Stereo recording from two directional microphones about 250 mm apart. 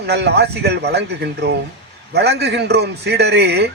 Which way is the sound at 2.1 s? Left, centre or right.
Right.